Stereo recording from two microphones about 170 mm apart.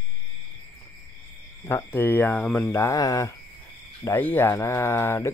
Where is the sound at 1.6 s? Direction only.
15° left (ahead or behind).